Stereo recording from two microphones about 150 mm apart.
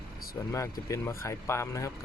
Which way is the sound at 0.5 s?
20° left (ahead or behind).